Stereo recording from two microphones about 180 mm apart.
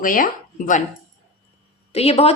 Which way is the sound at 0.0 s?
50° left (ahead or behind).